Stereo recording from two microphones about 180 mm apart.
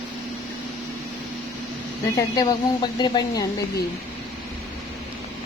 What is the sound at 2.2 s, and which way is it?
Speech, 25° left (ahead or behind).